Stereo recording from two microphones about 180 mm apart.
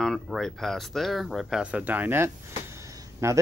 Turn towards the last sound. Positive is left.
turn(degrees=-15)  # may be behind; listen again after turning